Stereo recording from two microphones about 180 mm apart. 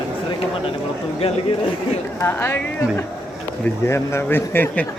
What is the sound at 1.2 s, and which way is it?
Speech, 35° left (ahead or behind).